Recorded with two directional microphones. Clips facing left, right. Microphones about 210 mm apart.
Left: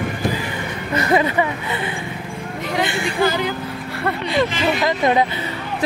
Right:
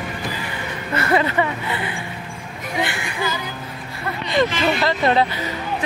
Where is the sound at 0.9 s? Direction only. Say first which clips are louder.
Left 2 dB; 15° left (ahead or behind).